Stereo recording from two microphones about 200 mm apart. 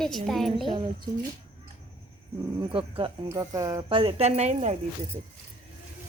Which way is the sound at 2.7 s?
25° right (ahead or behind).